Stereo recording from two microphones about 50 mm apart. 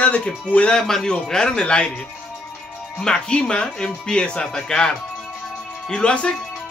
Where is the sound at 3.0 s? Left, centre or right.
Centre.